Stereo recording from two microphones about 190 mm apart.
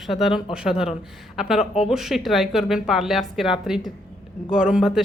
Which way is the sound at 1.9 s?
Centre (ahead or behind).